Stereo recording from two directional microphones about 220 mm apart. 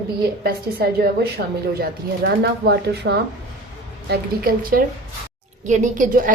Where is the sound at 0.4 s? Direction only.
45° right (ahead or behind).